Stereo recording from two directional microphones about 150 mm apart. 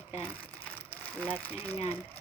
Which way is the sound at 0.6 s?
10° left (ahead or behind).